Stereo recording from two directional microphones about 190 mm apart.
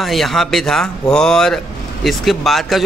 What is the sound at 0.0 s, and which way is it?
Speech, centre (ahead or behind).